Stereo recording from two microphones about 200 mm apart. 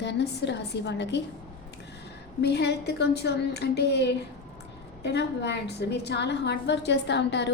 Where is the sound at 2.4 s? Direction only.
55° left (ahead or behind).